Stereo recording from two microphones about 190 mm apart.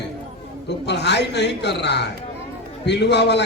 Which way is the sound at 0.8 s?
65° left (ahead or behind).